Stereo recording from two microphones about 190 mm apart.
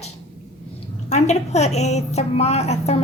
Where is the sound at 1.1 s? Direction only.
35° left (ahead or behind).